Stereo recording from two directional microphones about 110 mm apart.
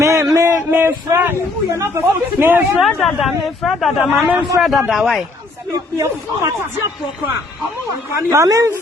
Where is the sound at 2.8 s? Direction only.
Centre (ahead or behind).